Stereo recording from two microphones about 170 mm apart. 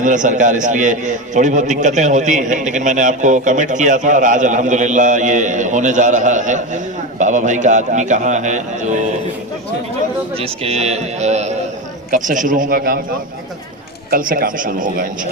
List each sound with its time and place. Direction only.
0.0 s a man's voice: 50° right (ahead or behind)
10.3 s a man's voice: 35° right (ahead or behind); by 13.0 s 55° right (ahead or behind)
14.1 s a man's voice: 55° right (ahead or behind)